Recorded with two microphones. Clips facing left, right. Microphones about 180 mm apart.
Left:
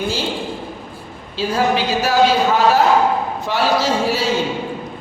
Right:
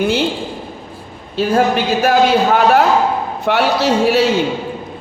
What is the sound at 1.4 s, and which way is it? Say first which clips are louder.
A man's voice: right 4 dB; 55° right (ahead or behind).